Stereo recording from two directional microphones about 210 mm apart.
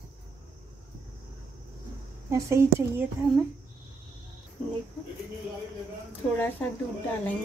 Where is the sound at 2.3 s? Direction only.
15° right (ahead or behind).